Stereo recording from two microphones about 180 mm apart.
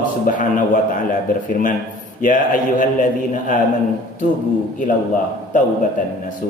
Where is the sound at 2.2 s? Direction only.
45° left (ahead or behind).